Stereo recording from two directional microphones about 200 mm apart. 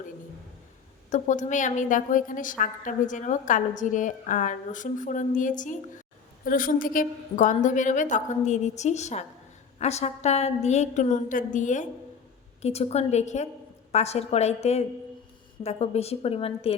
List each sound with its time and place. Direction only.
1.1 s a woman's voice: 40° left (ahead or behind)